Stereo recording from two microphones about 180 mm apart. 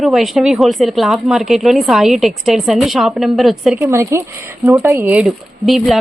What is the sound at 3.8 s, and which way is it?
A woman's voice, 15° right (ahead or behind).